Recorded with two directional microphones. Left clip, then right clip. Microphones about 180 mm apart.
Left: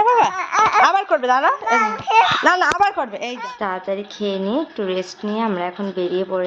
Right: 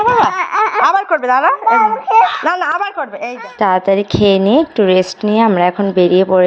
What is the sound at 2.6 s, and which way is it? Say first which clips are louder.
Speech: even; 15° left (ahead or behind).